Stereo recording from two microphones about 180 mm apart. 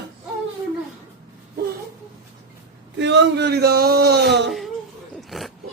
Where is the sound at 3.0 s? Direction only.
75° right (ahead or behind).